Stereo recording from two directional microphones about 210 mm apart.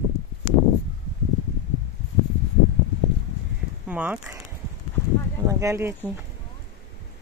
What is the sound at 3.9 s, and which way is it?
Speech, 5° right (ahead or behind).